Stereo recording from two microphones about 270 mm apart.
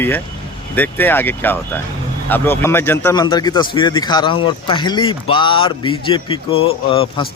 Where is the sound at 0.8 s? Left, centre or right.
Centre.